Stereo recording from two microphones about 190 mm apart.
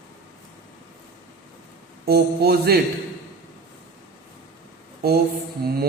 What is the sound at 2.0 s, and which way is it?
Mantra, 55° right (ahead or behind).